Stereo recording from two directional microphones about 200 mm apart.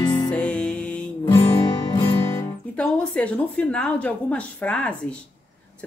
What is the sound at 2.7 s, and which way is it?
A woman's voice, 5° left (ahead or behind).